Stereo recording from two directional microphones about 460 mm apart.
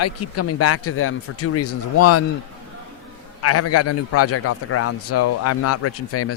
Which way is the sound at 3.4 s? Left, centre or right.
Left.